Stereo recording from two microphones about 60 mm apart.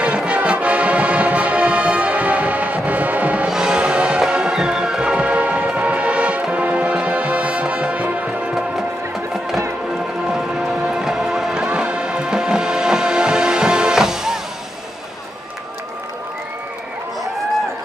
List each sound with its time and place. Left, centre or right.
0.0 s music: centre
3.4 s music: centre
10.2 s music: centre